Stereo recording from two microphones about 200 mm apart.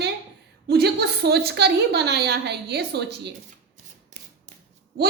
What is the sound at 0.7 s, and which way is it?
A woman's voice, 55° right (ahead or behind).